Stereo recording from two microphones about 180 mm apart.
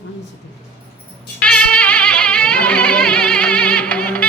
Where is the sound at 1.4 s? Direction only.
5° left (ahead or behind).